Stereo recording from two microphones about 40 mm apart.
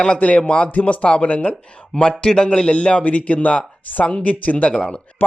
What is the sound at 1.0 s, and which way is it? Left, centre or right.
A man's voice, left.